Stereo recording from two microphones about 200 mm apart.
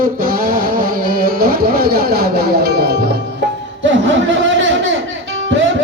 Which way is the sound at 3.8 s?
70° right (ahead or behind).